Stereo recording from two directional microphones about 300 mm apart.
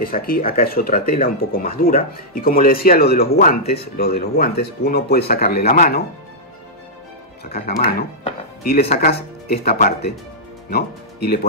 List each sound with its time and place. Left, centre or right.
0.0 s speech: left
7.5 s speech: left